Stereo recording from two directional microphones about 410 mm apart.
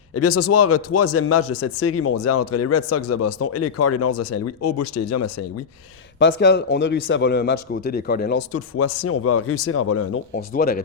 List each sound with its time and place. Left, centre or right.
0.1 s a man's voice: left
6.1 s speech: left
8.4 s a man's voice: left
10.3 s speech: left